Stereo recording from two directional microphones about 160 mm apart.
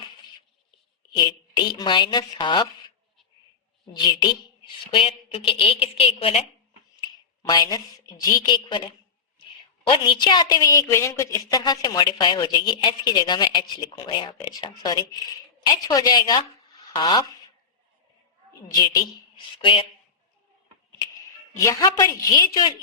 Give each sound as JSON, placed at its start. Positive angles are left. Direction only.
{"t": 1.1, "sound": "a woman's voice", "side_deg": 30}
{"t": 3.9, "sound": "a woman's voice", "side_deg": 25}
{"t": 7.4, "sound": "a woman's voice", "side_deg": 25}
{"t": 10.1, "sound": "a woman's voice", "side_deg": 30}
{"t": 21.5, "sound": "a woman's voice", "side_deg": 20}